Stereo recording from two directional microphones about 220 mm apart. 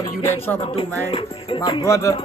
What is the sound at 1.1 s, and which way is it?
Speech, 20° left (ahead or behind).